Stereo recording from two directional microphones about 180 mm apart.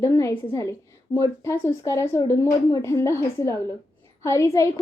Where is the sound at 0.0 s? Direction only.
15° left (ahead or behind).